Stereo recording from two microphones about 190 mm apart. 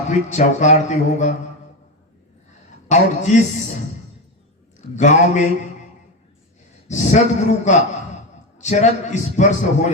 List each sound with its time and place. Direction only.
0.1 s a man's voice: 40° left (ahead or behind)
2.9 s a man's voice: 40° left (ahead or behind)
4.9 s a man's voice: 40° left (ahead or behind)
6.8 s a man's voice: 40° left (ahead or behind)